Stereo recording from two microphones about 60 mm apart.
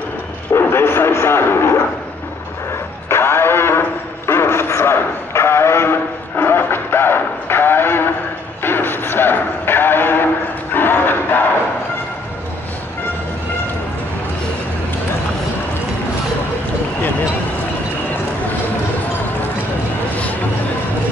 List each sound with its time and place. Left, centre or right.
0.5 s music: left
3.1 s radio: left
4.3 s music: left
10.7 s a sound: left